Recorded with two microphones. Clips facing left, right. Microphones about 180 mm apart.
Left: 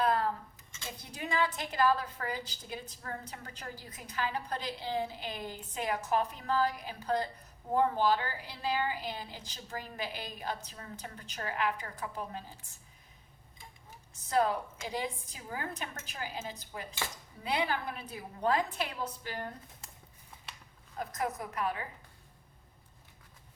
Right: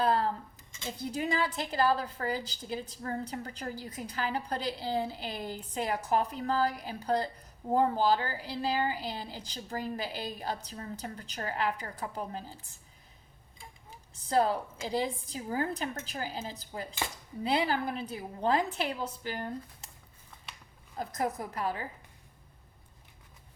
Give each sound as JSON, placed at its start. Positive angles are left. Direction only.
{"t": 0.0, "sound": "a sound", "side_deg": -30}
{"t": 1.1, "sound": "a woman's voice", "side_deg": -35}
{"t": 14.3, "sound": "a woman's voice", "side_deg": -35}
{"t": 21.0, "sound": "a woman's voice", "side_deg": -30}